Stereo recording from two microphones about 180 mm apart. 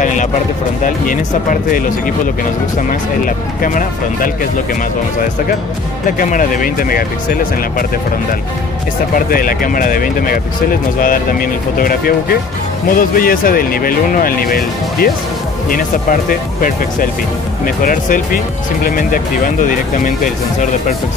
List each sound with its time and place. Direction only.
0.0 s a sound: 45° left (ahead or behind)
0.8 s speech: 50° left (ahead or behind)
2.9 s speech: 50° left (ahead or behind)
6.0 s speech: 50° left (ahead or behind)
9.1 s speech: 50° left (ahead or behind)